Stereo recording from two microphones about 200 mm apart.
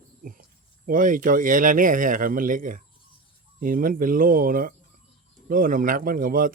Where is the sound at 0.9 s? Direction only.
40° right (ahead or behind).